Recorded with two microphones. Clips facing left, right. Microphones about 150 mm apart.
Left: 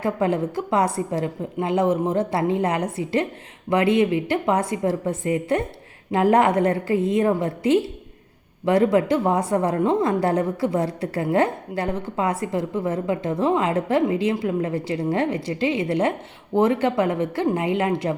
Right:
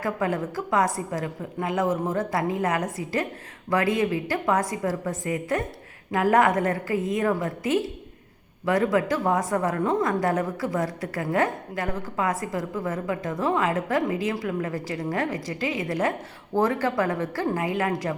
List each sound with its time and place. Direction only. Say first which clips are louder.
0.0 s a woman's voice: left 4 dB; 25° left (ahead or behind)